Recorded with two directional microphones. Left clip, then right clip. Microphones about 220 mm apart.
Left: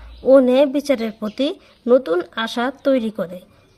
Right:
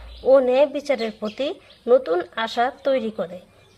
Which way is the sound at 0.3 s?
35° left (ahead or behind).